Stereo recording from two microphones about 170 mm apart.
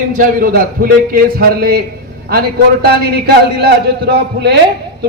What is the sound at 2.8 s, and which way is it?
A man's voice, 70° right (ahead or behind).